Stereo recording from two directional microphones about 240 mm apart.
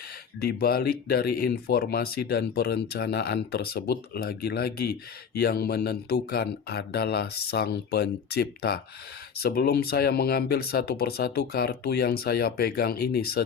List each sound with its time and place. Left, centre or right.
0.3 s speech: left